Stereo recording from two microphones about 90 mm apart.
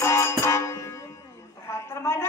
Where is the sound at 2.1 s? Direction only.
30° left (ahead or behind).